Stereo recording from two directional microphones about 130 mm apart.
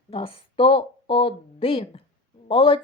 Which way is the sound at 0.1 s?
45° left (ahead or behind).